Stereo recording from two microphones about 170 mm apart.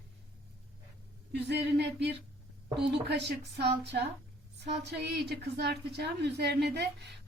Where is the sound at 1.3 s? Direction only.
80° right.